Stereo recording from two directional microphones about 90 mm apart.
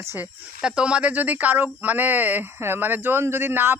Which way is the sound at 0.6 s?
10° right (ahead or behind).